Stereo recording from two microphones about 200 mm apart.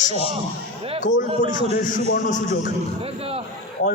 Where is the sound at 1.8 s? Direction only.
40° left (ahead or behind).